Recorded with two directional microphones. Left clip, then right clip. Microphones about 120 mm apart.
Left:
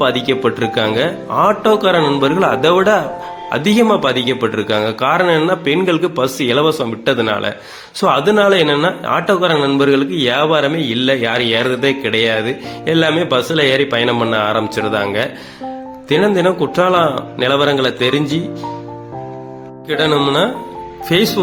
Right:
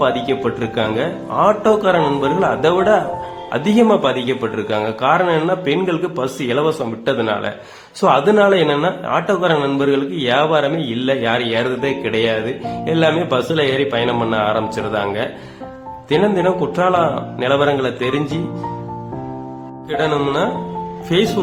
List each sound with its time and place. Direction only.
0.0 s speech: 25° left (ahead or behind)
19.9 s speech: 25° left (ahead or behind)